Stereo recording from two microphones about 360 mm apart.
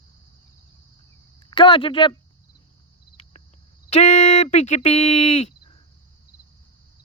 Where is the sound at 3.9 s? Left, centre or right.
Centre.